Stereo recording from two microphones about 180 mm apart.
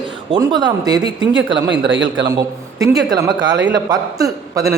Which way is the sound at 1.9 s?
90° right.